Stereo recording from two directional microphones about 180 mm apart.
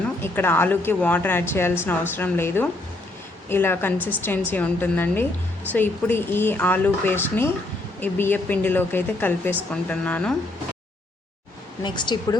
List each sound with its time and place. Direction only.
0.2 s speech: 10° left (ahead or behind)
3.9 s a woman's voice: 10° right (ahead or behind)
4.2 s speech: 10° left (ahead or behind)
11.8 s speech: 25° left (ahead or behind)